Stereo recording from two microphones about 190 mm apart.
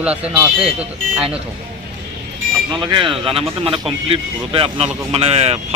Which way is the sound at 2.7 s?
25° right (ahead or behind).